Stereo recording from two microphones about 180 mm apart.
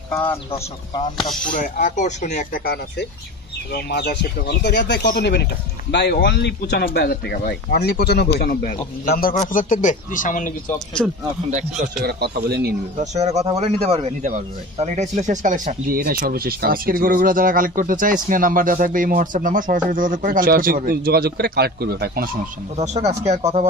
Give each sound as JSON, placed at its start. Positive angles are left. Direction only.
{"t": 1.4, "sound": "speech", "side_deg": 45}
{"t": 12.0, "sound": "a man's voice", "side_deg": -65}
{"t": 13.0, "sound": "a man's voice", "side_deg": -40}
{"t": 22.8, "sound": "speech", "side_deg": -40}